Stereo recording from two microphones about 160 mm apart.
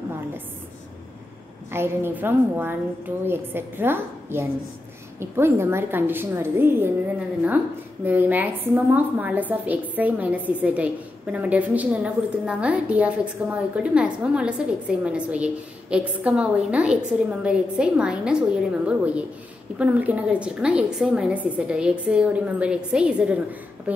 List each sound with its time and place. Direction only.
1.7 s a woman's voice: 15° right (ahead or behind)